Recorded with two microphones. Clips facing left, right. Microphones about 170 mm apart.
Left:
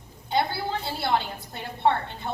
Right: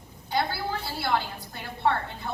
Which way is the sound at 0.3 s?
20° left (ahead or behind).